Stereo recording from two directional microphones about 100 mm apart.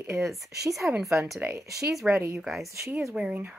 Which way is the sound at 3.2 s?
15° right (ahead or behind).